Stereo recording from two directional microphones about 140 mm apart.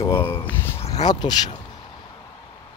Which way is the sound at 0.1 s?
15° left (ahead or behind).